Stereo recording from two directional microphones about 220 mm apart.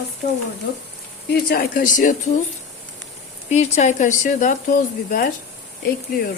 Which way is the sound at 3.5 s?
30° left (ahead or behind).